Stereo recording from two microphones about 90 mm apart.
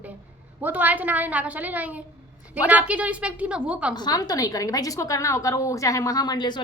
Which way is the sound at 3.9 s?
45° left (ahead or behind).